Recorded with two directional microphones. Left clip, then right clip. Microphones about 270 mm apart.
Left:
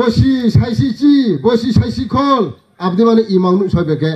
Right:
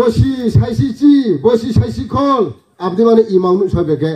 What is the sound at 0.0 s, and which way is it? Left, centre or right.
Speech, left.